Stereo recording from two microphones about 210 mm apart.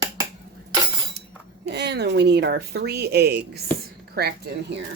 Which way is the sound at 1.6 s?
50° right (ahead or behind).